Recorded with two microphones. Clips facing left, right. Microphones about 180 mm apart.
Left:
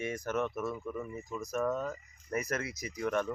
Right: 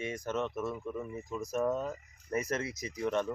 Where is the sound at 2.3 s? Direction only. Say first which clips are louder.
Right 1 dB; 25° right (ahead or behind).